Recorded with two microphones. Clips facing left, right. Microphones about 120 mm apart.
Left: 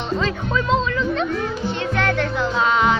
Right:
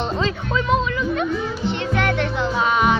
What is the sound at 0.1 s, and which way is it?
Speech, 20° right (ahead or behind).